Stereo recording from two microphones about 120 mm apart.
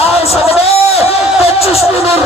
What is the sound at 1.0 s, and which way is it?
Speech, 55° left (ahead or behind).